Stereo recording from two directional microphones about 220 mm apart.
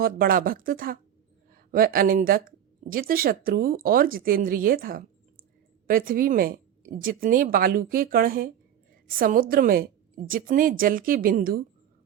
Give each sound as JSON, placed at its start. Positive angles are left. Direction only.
{"t": 0.0, "sound": "speech", "side_deg": -40}